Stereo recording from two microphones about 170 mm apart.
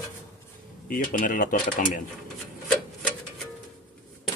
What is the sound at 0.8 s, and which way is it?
Speech, 55° left (ahead or behind).